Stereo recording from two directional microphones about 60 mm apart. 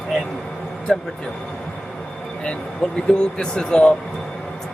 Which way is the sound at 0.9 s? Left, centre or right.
Centre.